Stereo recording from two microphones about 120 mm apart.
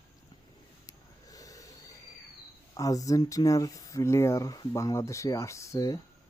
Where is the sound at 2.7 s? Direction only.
30° left (ahead or behind).